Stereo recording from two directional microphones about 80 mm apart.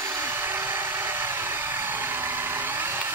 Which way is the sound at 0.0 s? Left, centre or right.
Right.